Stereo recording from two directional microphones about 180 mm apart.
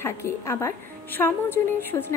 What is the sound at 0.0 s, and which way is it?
A woman's voice, 15° left (ahead or behind).